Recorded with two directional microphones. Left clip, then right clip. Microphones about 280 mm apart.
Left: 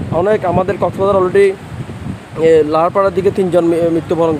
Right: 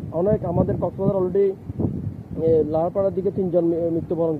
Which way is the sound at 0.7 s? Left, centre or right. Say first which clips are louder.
Left 10 dB; left.